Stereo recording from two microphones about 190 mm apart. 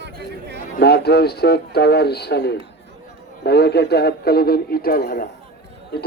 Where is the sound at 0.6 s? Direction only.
60° left (ahead or behind).